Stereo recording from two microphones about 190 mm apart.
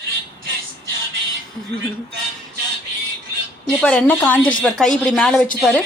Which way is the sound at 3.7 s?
5° left (ahead or behind).